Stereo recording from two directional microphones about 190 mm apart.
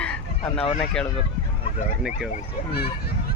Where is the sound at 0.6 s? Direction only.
30° left (ahead or behind).